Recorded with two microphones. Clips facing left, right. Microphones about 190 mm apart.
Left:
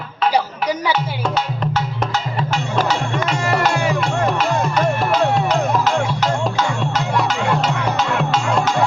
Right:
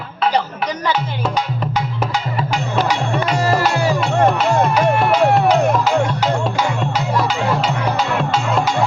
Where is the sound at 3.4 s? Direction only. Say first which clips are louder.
Right 2 dB; 35° right (ahead or behind).